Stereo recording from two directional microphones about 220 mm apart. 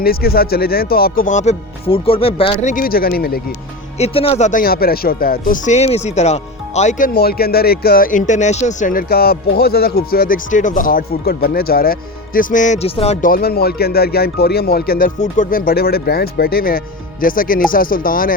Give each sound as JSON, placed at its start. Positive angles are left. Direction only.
{"t": 0.0, "sound": "speech", "side_deg": 45}
{"t": 2.7, "sound": "speech", "side_deg": 40}
{"t": 3.9, "sound": "speech", "side_deg": 25}